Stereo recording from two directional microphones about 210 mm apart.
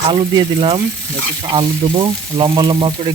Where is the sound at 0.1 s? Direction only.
20° right (ahead or behind).